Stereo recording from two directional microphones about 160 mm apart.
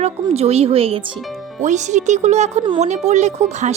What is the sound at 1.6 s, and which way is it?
Speech, 50° right (ahead or behind).